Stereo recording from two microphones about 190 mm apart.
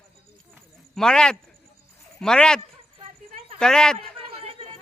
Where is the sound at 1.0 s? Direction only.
5° left (ahead or behind).